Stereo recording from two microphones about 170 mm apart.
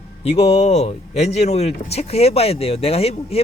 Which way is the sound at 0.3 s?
35° left (ahead or behind).